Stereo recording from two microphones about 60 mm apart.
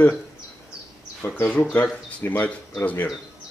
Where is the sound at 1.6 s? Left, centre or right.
Left.